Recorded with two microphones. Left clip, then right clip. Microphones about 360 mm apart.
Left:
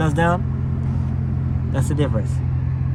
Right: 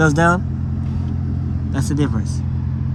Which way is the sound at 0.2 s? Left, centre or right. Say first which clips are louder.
Right 4 dB; centre.